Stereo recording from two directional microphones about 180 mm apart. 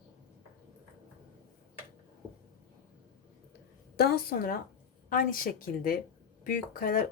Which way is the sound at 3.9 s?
60° left (ahead or behind).